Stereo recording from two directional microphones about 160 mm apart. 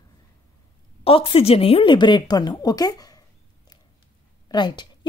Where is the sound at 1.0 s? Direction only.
35° left (ahead or behind).